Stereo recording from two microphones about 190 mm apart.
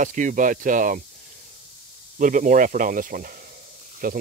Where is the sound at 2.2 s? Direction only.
45° right (ahead or behind).